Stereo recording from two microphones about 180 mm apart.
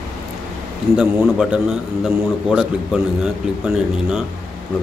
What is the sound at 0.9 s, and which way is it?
Speech, 5° right (ahead or behind).